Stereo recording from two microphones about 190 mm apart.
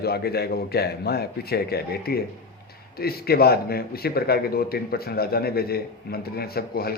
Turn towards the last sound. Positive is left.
turn(degrees=55)  # may be behind; listen again after turning